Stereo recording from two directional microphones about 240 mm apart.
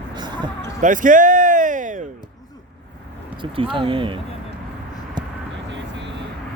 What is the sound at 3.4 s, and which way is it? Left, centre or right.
Speech, right.